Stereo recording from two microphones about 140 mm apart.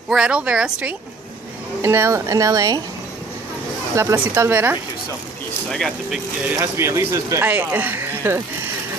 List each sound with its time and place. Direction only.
0.1 s speech: 5° right (ahead or behind)
1.8 s speech: 20° right (ahead or behind)
3.9 s speech: 15° right (ahead or behind)
5.7 s speech: 5° left (ahead or behind)
6.5 s speech: 20° right (ahead or behind)